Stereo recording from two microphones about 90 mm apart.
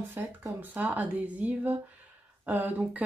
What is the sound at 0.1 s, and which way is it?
Speech, 25° right (ahead or behind).